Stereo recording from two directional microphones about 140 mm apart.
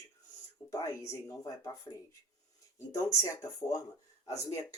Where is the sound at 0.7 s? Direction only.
20° left (ahead or behind).